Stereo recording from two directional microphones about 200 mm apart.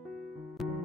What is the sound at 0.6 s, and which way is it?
Music, centre (ahead or behind).